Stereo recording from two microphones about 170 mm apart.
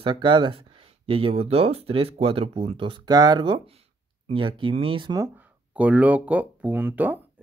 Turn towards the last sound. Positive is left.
turn(degrees=-10)  # may be behind; listen again after turning